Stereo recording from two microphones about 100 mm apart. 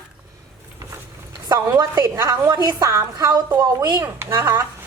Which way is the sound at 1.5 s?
35° right (ahead or behind).